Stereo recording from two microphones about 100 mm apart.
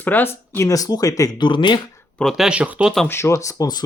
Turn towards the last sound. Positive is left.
turn(degrees=40)  # may be behind; listen again after turning